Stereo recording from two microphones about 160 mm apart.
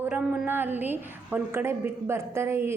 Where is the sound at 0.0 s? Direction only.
5° right (ahead or behind).